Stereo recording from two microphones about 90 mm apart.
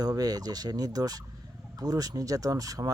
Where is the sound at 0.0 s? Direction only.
45° right (ahead or behind).